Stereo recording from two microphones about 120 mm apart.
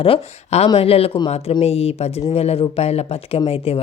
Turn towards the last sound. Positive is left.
turn(degrees=55)  # may be behind; listen again after turning